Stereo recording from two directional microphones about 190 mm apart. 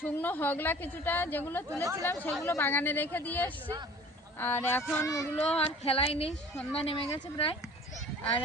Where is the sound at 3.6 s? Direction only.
15° right (ahead or behind).